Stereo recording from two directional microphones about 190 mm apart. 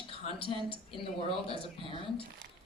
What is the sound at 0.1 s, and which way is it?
A woman's voice, 25° left (ahead or behind).